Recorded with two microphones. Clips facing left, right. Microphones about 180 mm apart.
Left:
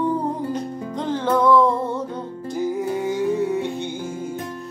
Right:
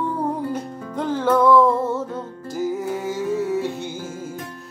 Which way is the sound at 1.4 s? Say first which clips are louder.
Right 1 dB; 5° right (ahead or behind).